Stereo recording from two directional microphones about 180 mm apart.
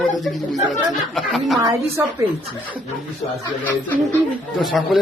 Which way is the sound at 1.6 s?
20° right (ahead or behind).